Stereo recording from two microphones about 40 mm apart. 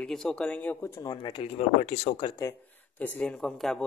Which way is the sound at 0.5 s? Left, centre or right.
Left.